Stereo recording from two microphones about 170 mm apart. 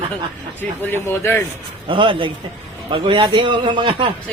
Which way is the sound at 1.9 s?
30° right (ahead or behind).